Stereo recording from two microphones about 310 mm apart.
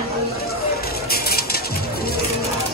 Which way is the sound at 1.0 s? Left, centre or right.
Left.